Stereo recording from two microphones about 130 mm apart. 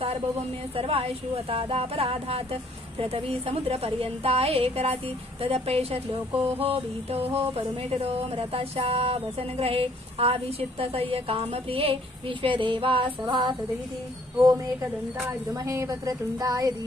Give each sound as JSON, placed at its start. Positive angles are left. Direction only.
{"t": 0.7, "sound": "music", "side_deg": -50}
{"t": 14.4, "sound": "speech", "side_deg": -25}